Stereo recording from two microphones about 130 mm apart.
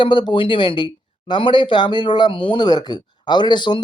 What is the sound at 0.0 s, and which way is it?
Speech, 35° left (ahead or behind).